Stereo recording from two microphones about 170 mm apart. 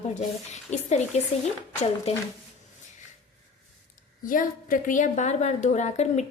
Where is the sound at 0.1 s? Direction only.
45° left (ahead or behind).